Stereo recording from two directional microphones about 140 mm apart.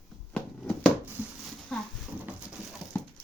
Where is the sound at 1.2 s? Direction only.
10° right (ahead or behind).